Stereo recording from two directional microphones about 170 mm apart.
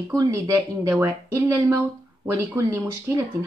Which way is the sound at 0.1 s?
15° right (ahead or behind).